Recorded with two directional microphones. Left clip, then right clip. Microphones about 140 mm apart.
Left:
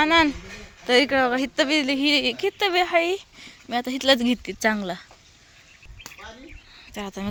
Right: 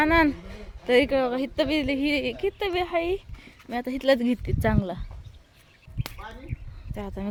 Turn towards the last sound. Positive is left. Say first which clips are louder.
# left 3 dB
turn(degrees=-5)  # may be behind; listen again after turning